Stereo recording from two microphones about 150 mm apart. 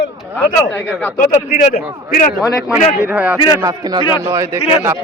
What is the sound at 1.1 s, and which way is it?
A man's voice, 65° left (ahead or behind).